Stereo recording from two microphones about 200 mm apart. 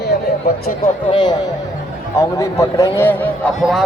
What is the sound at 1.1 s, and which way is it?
A man's voice, 25° left (ahead or behind).